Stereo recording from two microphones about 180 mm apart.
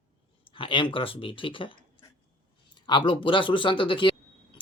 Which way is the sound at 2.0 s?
30° left (ahead or behind).